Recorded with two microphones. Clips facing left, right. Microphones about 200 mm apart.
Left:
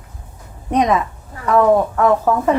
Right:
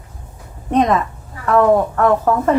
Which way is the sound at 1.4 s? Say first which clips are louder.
Even; centre (ahead or behind).